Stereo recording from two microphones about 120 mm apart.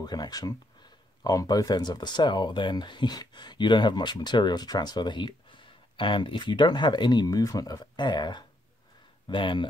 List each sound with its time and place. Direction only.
0.0 s speech: 35° left (ahead or behind)